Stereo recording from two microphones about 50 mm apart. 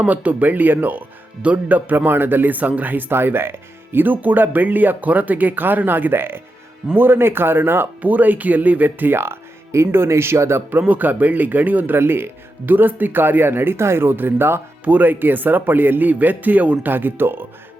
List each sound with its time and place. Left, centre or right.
0.0 s speech: right
8.0 s speech: right
9.1 s music: right
9.9 s speech: right
10.7 s speech: right
11.9 s speech: right
14.8 s speech: right